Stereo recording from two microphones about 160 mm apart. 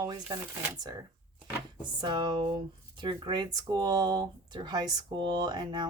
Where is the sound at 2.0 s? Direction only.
30° right (ahead or behind).